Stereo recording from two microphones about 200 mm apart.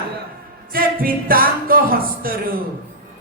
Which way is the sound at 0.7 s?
45° right (ahead or behind).